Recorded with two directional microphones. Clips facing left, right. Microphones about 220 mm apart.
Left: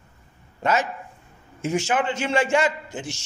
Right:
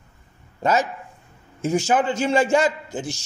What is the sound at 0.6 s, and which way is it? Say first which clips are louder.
A man's voice: right 2 dB; 35° right (ahead or behind).